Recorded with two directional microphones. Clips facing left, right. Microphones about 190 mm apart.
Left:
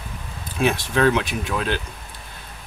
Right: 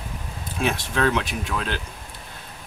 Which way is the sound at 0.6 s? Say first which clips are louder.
Left 4 dB; 10° left (ahead or behind).